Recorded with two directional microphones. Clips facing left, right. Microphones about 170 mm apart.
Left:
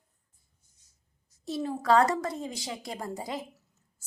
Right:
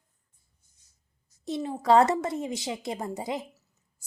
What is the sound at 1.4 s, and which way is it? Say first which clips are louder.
A woman's voice: right 1 dB; 20° right (ahead or behind).